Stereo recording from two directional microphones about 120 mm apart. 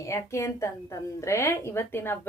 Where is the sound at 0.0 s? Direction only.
25° left (ahead or behind).